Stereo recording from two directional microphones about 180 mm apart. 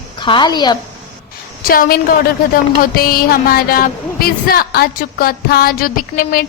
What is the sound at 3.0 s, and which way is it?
A woman's voice, 55° left (ahead or behind).